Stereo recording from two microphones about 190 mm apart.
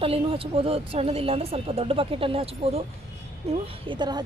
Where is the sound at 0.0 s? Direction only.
30° right (ahead or behind).